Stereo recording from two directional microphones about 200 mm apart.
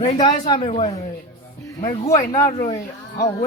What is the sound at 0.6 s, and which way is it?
Speech, 35° left (ahead or behind).